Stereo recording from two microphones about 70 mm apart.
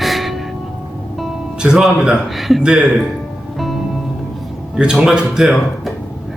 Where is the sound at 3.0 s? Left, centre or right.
Centre.